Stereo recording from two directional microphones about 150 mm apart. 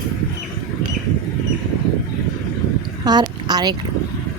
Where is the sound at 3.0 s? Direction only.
25° right (ahead or behind).